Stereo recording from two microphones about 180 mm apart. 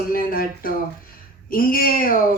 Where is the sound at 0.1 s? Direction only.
55° left (ahead or behind).